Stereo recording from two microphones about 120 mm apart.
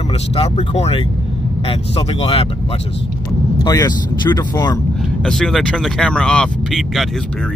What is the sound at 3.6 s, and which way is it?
Speech, 30° left (ahead or behind).